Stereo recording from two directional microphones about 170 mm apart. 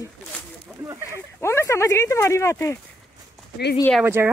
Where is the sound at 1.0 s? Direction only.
15° left (ahead or behind).